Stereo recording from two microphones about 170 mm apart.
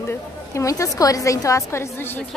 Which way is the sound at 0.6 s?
20° left (ahead or behind).